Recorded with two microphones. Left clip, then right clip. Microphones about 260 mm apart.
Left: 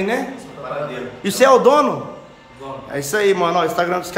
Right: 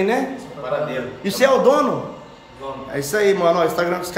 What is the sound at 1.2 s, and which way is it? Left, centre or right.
Speech, centre.